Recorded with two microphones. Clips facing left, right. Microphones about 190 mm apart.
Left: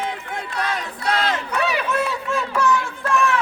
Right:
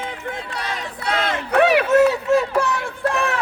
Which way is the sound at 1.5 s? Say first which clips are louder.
Right 12 dB; 60° right (ahead or behind).